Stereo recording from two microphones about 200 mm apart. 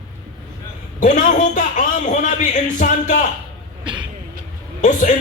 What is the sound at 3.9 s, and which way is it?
Vehicle, 25° right (ahead or behind).